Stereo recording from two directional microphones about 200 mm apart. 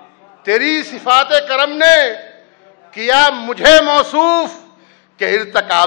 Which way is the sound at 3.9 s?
25° left (ahead or behind).